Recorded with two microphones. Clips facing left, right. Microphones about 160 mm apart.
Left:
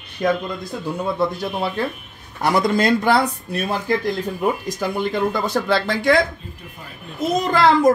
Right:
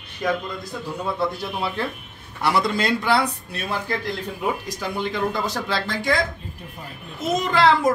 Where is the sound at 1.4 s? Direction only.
45° left (ahead or behind); by 6.2 s 60° left (ahead or behind).